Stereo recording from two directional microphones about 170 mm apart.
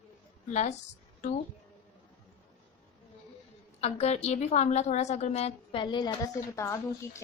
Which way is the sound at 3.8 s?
40° left (ahead or behind).